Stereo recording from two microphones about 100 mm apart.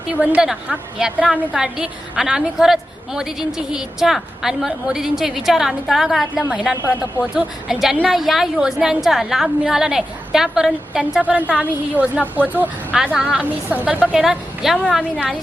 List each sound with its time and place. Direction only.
0.2 s a woman's voice: 10° right (ahead or behind)
13.0 s a woman's voice: 5° right (ahead or behind)